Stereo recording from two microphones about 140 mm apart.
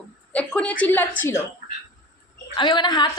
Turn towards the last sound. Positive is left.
turn(degrees=30)  # may be behind; listen again after turning